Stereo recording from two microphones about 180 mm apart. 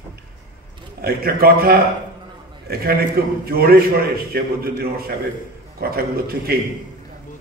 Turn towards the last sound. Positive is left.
turn(degrees=-55)  # may be behind; listen again after turning